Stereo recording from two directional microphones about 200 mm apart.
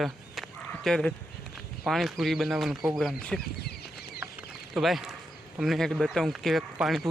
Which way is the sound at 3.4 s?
55° left (ahead or behind).